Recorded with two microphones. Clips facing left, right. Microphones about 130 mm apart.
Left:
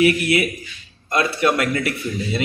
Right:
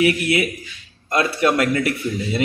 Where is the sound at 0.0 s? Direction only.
25° right (ahead or behind).